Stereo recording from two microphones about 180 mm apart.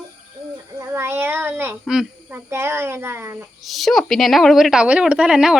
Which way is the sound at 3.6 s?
Centre (ahead or behind).